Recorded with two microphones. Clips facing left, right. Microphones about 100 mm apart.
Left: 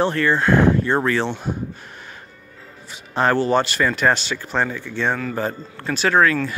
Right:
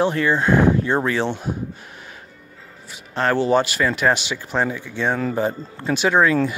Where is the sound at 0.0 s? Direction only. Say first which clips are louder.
Even; 15° right (ahead or behind).